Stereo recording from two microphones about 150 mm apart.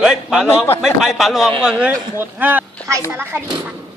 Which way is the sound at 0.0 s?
5° right (ahead or behind).